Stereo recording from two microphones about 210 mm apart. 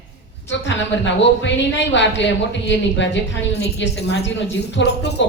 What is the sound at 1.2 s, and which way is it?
Speech, 60° left (ahead or behind).